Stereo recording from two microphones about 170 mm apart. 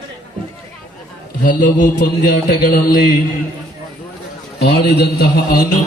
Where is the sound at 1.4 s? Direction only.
50° left (ahead or behind).